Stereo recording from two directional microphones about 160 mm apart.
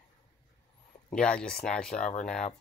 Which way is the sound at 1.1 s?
5° left (ahead or behind).